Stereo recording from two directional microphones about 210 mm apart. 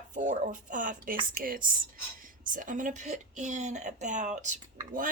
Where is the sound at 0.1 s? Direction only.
35° right (ahead or behind).